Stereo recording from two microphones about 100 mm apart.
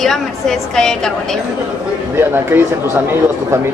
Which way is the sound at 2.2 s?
20° right (ahead or behind).